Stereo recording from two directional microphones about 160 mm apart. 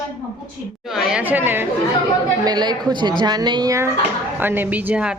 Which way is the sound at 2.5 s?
25° right (ahead or behind).